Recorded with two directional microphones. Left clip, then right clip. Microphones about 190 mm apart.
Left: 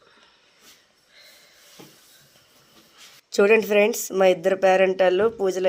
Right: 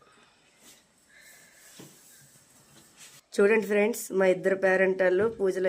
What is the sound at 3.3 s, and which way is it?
Speech, 5° right (ahead or behind).